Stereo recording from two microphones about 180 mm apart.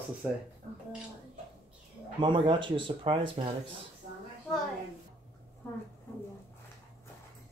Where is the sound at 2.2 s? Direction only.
25° right (ahead or behind).